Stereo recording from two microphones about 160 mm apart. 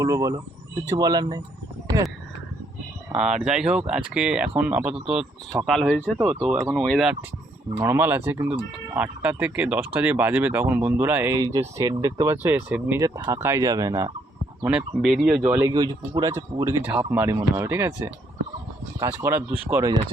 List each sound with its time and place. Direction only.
0.0 s speech: 20° right (ahead or behind)
3.4 s speech: 5° right (ahead or behind)
6.2 s speech: 30° right (ahead or behind)
6.8 s speech: centre (ahead or behind); by 14.1 s 20° right (ahead or behind)
14.6 s speech: 5° right (ahead or behind)
15.6 s speech: 25° right (ahead or behind)